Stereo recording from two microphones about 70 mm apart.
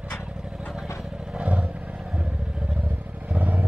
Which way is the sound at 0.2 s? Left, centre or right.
Centre.